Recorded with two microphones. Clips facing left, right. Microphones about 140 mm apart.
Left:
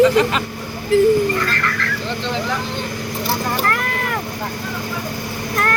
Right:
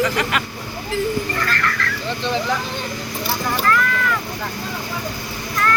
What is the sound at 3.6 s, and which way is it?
Vehicle, 50° left (ahead or behind).